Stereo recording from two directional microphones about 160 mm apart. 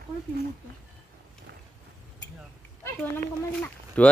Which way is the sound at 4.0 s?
10° left (ahead or behind).